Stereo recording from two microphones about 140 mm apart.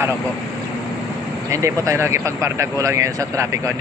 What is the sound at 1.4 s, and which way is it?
Speech, 20° right (ahead or behind).